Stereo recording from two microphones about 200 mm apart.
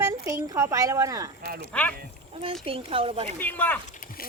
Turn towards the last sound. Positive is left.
turn(degrees=10)  # may be behind; listen again after turning